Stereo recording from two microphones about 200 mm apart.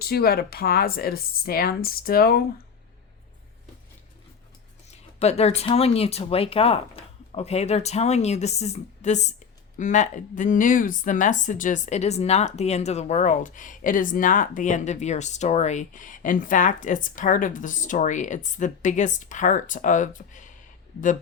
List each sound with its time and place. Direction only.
0.0 s speech: 50° left (ahead or behind)
4.9 s speech: 30° left (ahead or behind)